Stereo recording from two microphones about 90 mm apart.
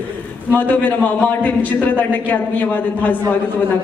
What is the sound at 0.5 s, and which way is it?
A man's voice, 20° left (ahead or behind).